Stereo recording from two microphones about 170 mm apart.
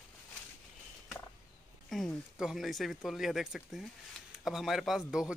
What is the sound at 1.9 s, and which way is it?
Speech, centre (ahead or behind).